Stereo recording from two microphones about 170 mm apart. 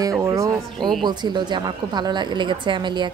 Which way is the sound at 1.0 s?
25° right (ahead or behind).